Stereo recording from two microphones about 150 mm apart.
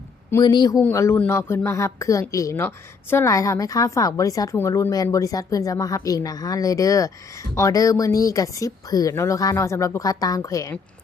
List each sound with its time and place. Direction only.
0.4 s speech: 30° left (ahead or behind)
0.8 s speech: 15° left (ahead or behind)